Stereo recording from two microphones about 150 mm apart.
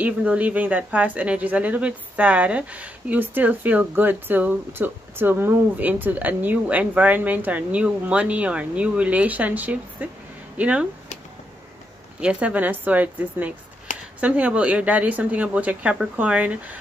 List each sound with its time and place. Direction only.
0.0 s speech: 10° right (ahead or behind)
12.2 s speech: 5° right (ahead or behind)
13.9 s a sound: 55° left (ahead or behind)
14.2 s speech: 10° right (ahead or behind)